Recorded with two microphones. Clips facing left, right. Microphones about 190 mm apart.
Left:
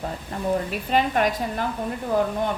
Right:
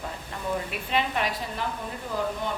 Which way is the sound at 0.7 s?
45° left (ahead or behind).